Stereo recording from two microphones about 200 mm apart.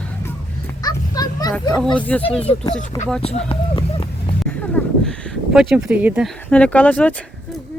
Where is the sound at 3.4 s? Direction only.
25° left (ahead or behind).